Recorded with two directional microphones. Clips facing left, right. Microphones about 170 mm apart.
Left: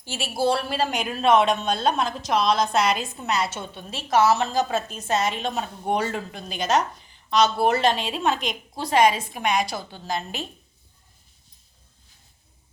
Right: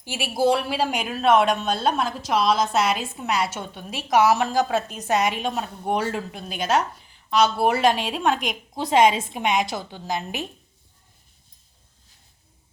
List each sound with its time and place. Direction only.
0.0 s a woman's voice: 15° right (ahead or behind)
8.7 s a woman's voice: 20° right (ahead or behind)